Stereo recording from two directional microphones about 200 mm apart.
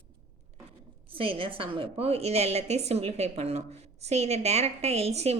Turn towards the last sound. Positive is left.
turn(degrees=-30)  # may be behind; listen again after turning